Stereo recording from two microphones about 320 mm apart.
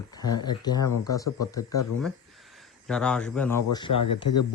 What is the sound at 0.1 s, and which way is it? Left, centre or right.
Speech, centre.